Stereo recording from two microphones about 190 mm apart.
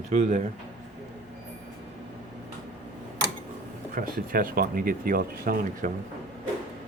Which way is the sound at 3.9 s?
50° right (ahead or behind).